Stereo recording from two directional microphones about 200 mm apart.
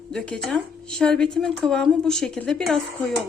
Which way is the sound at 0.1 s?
5° left (ahead or behind).